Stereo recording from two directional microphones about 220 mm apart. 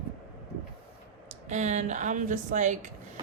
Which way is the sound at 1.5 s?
30° right (ahead or behind).